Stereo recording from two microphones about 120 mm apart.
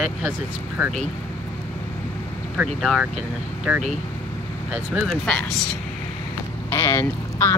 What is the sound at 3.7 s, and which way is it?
Speech, 15° right (ahead or behind).